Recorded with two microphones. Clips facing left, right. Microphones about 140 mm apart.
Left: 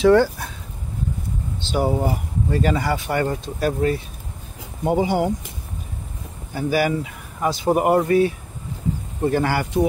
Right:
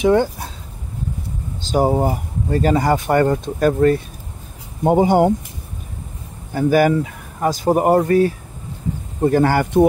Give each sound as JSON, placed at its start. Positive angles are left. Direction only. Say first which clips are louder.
{"t": 0.0, "sound": "speech", "louder": "left 1 dB", "side_deg": -20}
{"t": 1.6, "sound": "speech", "louder": "right 5 dB", "side_deg": -40}
{"t": 6.5, "sound": "speech", "louder": "right 6 dB", "side_deg": -50}